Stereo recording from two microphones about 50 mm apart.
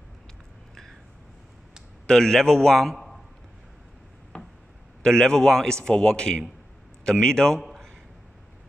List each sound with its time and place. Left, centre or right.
2.0 s a man's voice: centre
4.3 s a sound: left
5.0 s a man's voice: centre